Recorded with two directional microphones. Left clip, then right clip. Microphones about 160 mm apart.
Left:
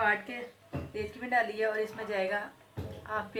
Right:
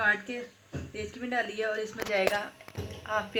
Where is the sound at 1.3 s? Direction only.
40° right (ahead or behind).